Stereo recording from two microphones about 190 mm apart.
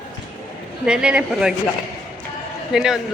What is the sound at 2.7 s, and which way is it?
Speech, 5° right (ahead or behind).